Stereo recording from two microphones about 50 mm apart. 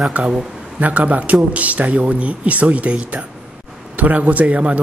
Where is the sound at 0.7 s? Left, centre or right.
Right.